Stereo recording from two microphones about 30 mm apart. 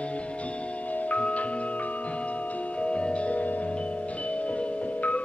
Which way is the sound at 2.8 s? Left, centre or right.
Left.